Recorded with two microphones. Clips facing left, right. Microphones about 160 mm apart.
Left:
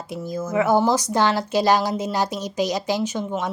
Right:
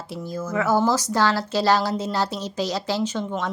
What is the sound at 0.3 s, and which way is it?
A woman's voice, 20° left (ahead or behind).